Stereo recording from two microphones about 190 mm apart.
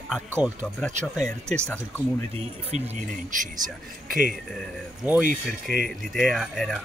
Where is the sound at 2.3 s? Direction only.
35° right (ahead or behind).